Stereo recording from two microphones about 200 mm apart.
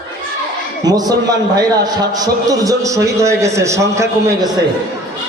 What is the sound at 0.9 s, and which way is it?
A man's voice, 20° right (ahead or behind).